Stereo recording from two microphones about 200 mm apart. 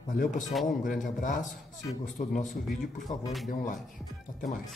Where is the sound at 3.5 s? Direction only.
40° left (ahead or behind).